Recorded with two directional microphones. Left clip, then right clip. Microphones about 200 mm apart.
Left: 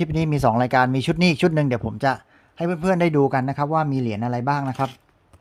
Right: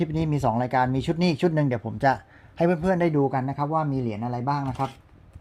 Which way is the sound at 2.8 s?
20° left (ahead or behind).